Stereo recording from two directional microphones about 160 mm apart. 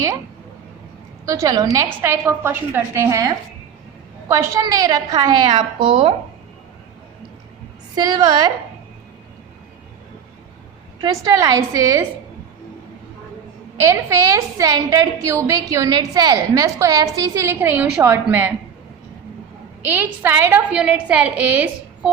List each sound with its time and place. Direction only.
1.2 s a woman's voice: 20° right (ahead or behind)
7.9 s a woman's voice: 25° right (ahead or behind)
11.0 s a woman's voice: 25° right (ahead or behind)
13.9 s a woman's voice: 20° right (ahead or behind)
19.9 s a woman's voice: 15° right (ahead or behind)